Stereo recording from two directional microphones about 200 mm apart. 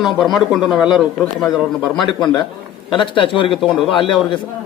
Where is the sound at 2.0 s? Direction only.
20° left (ahead or behind).